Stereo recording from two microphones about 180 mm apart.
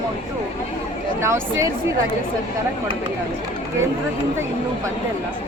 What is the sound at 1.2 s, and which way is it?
Speech, 15° right (ahead or behind).